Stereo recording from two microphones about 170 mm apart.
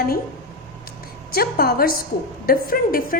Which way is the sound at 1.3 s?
65° left (ahead or behind).